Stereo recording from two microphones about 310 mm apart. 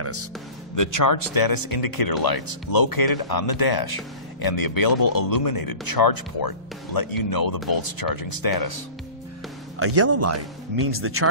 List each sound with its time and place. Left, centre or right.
0.0 s music: right
0.7 s speech: left
9.8 s speech: right